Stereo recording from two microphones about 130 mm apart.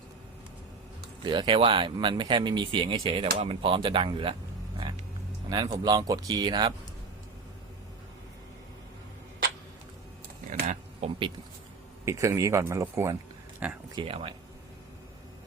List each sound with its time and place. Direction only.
1.2 s speech: 35° right (ahead or behind)
5.5 s speech: 35° right (ahead or behind)
10.5 s a sound: 60° right (ahead or behind)
12.0 s speech: 25° right (ahead or behind)
13.9 s speech: 45° right (ahead or behind)